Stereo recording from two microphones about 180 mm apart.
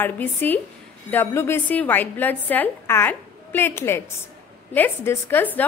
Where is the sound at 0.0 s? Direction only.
10° left (ahead or behind).